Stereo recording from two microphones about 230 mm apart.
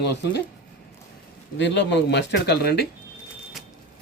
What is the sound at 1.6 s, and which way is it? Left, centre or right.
Speech, left.